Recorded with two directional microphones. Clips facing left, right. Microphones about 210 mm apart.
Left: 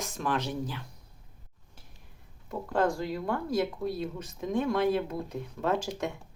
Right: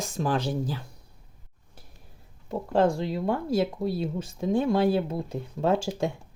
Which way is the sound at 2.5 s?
25° right (ahead or behind).